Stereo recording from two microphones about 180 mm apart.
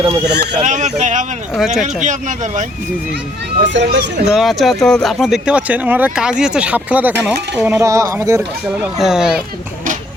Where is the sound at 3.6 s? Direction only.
75° right (ahead or behind).